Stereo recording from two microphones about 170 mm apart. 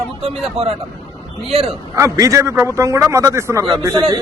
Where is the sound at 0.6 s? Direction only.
35° right (ahead or behind).